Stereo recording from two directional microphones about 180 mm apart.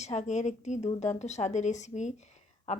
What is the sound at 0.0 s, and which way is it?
Speech, 40° left (ahead or behind).